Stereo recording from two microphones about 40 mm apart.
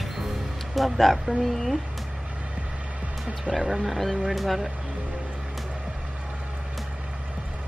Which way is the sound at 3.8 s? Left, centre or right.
Centre.